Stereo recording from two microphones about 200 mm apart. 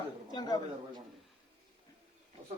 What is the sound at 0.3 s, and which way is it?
Speech, 20° left (ahead or behind).